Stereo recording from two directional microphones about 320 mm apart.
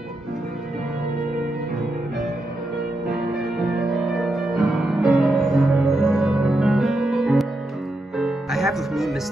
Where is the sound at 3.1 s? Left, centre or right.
Centre.